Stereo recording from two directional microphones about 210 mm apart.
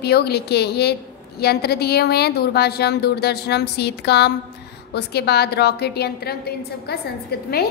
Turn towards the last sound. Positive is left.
turn(degrees=50)  # may be behind; listen again after turning